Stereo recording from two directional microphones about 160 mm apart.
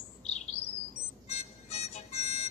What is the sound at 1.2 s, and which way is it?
Music, 40° left (ahead or behind).